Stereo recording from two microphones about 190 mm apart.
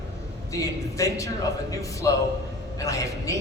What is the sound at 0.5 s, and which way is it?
A man's voice, 15° left (ahead or behind).